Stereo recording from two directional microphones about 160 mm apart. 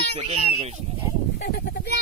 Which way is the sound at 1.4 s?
90° left.